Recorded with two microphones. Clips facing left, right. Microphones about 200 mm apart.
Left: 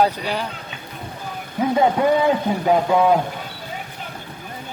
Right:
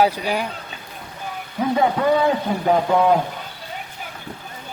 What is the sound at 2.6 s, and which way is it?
Speech, 5° left (ahead or behind).